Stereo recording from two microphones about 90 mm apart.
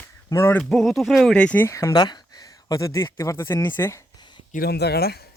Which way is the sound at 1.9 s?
50° left (ahead or behind).